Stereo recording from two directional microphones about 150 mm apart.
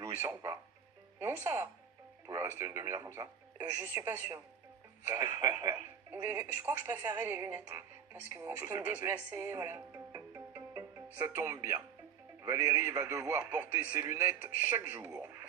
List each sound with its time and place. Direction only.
0.0 s a man's voice: 15° right (ahead or behind)